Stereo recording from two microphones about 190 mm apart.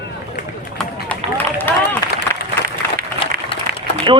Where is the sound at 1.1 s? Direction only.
10° left (ahead or behind).